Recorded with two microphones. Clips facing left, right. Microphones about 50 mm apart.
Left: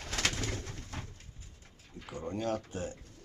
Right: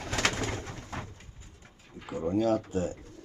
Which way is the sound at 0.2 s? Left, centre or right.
Right.